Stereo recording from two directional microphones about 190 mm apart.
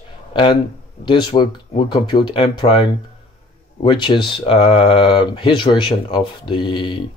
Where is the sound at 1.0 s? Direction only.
25° left (ahead or behind).